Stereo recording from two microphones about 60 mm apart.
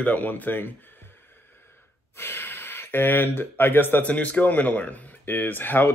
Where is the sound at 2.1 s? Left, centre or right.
Left.